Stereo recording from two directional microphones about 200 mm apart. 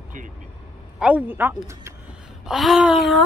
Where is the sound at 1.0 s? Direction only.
5° right (ahead or behind).